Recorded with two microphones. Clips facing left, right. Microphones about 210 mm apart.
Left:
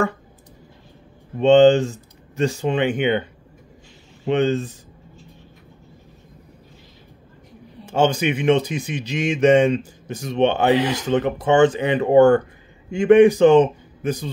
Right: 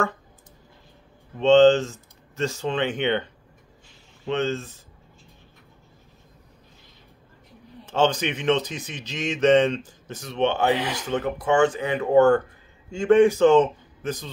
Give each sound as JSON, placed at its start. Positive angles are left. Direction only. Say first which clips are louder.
{"t": 1.4, "sound": "speech", "louder": "left 3 dB", "side_deg": 15}
{"t": 4.3, "sound": "speech", "louder": "left 6 dB", "side_deg": 15}
{"t": 7.8, "sound": "speech", "louder": "left 3 dB", "side_deg": 10}